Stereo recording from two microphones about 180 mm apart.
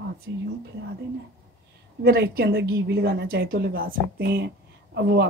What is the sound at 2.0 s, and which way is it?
Speech, 60° right (ahead or behind).